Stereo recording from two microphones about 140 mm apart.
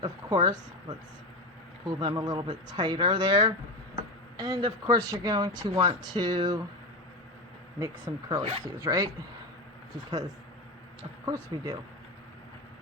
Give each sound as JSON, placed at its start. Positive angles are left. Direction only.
{"t": 0.0, "sound": "a woman's voice", "side_deg": -30}
{"t": 8.4, "sound": "speech", "side_deg": -40}
{"t": 8.8, "sound": "speech", "side_deg": -25}
{"t": 11.3, "sound": "speech", "side_deg": -25}